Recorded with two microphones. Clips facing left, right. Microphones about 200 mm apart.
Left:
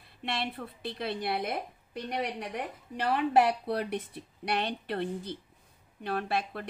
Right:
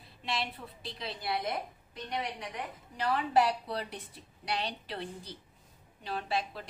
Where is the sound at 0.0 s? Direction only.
55° left (ahead or behind).